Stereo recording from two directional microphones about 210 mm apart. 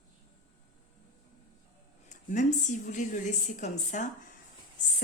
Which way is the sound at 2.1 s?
35° left (ahead or behind).